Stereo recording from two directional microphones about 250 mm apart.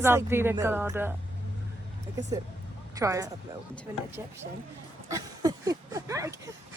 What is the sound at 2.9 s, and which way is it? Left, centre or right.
Speech, centre.